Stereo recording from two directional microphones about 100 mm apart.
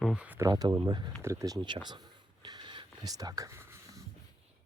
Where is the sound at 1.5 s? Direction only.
50° right (ahead or behind).